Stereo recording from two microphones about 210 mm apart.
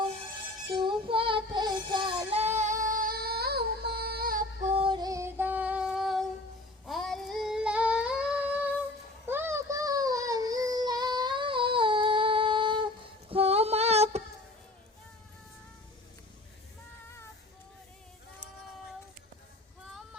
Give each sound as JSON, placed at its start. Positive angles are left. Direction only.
{"t": 0.7, "sound": "child singing", "side_deg": -25}
{"t": 4.7, "sound": "female singing", "side_deg": -25}
{"t": 9.2, "sound": "child singing", "side_deg": -10}
{"t": 13.3, "sound": "female singing", "side_deg": -30}